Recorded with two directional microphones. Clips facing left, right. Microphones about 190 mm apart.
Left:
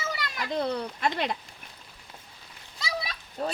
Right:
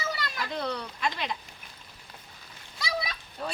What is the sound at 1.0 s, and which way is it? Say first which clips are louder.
Speech: left 3 dB; 55° left (ahead or behind).